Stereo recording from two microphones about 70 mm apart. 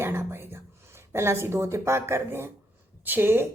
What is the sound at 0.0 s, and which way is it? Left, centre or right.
Whispering, right.